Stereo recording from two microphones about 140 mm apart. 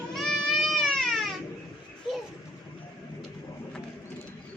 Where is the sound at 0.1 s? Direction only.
Centre (ahead or behind).